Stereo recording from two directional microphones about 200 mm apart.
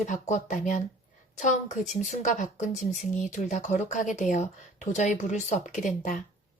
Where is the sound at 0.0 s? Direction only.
40° left (ahead or behind).